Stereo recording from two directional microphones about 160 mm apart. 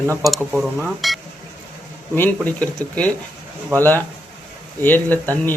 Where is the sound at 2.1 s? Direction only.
10° left (ahead or behind).